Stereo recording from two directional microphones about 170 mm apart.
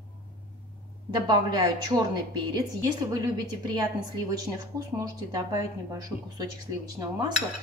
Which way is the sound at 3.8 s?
20° right (ahead or behind).